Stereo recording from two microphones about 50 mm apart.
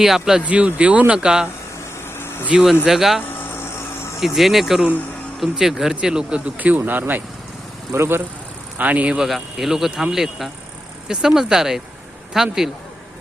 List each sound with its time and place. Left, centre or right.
0.0 s speech: centre
0.4 s speech: right
2.0 s vehicle: left
2.5 s speech: centre
4.2 s speech: centre
6.6 s speech: right
7.9 s speech: right
8.8 s speech: right
9.2 s speech: centre